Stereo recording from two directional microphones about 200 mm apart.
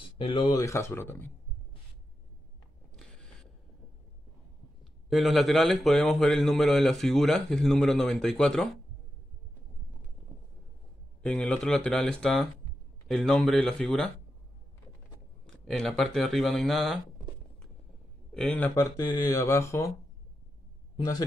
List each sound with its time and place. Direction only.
0.0 s speech: 25° left (ahead or behind)
5.1 s a man's voice: centre (ahead or behind)
11.2 s a man's voice: 5° left (ahead or behind)
15.4 s a man's voice: 5° left (ahead or behind)
18.3 s speech: 5° left (ahead or behind)